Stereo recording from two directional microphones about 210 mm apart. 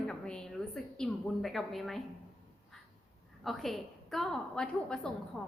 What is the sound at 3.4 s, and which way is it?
A woman's voice, centre (ahead or behind).